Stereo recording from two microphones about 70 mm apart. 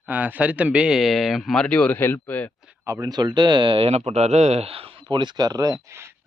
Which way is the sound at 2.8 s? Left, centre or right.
Right.